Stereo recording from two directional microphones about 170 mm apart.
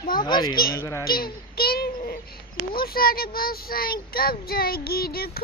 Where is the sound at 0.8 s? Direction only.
15° left (ahead or behind).